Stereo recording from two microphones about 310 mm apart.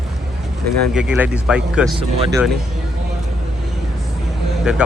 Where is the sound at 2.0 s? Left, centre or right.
Centre.